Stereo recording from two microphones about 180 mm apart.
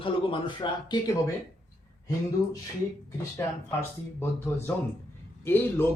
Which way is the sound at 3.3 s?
15° left (ahead or behind).